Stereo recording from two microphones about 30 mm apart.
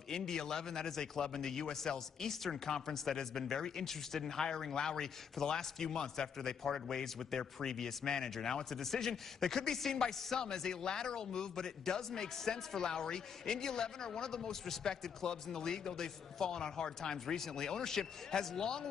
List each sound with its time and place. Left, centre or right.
0.3 s a man's voice: left